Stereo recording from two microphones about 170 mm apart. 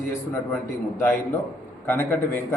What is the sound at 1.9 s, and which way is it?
Speech, 10° left (ahead or behind).